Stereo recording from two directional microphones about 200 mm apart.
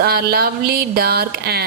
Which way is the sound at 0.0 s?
50° right (ahead or behind).